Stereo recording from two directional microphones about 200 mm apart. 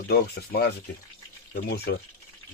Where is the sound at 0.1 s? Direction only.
55° left (ahead or behind).